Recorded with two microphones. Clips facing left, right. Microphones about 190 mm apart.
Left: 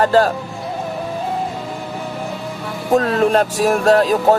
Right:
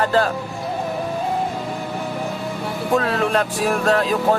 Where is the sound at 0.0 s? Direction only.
40° left (ahead or behind).